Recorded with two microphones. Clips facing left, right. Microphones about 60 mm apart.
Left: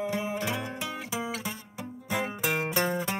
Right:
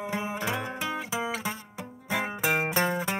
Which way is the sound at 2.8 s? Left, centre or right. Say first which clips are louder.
Right 1 dB; right.